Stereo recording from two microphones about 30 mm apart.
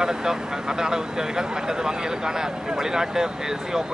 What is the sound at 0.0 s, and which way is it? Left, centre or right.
A man's voice, centre.